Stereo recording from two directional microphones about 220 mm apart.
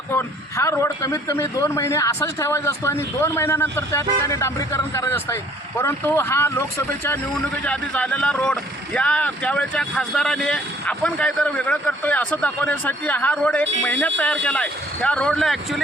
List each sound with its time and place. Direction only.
0.1 s a man's voice: 10° left (ahead or behind)